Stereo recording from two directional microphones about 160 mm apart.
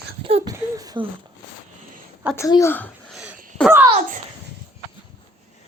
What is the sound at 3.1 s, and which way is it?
Throat clearing, 5° right (ahead or behind).